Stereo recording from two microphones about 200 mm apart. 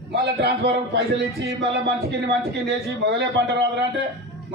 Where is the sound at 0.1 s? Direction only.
55° right (ahead or behind).